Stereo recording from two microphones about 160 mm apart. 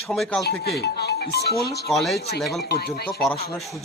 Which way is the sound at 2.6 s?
75° left (ahead or behind).